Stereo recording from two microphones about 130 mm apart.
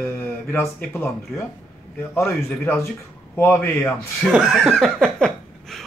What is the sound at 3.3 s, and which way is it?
Speech, 15° left (ahead or behind).